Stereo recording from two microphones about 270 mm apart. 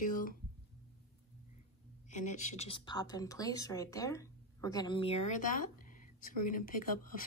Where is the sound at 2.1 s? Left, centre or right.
Left.